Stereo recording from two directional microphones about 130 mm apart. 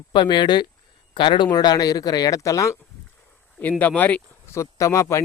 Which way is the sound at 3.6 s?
10° left (ahead or behind).